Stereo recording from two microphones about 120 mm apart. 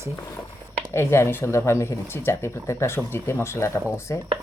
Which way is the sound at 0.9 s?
20° left (ahead or behind).